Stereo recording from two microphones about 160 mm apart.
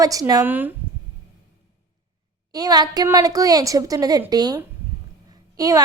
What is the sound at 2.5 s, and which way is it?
A woman's voice, 25° right (ahead or behind).